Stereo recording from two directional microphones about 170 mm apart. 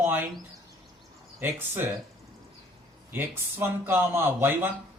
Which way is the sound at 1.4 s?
10° right (ahead or behind).